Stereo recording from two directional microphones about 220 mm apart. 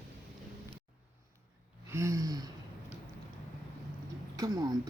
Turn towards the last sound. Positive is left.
turn(degrees=-15)  # may be behind; listen again after turning